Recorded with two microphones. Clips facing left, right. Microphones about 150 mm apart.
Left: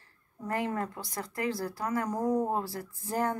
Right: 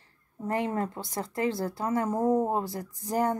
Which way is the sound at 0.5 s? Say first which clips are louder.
Right 3 dB; 25° right (ahead or behind).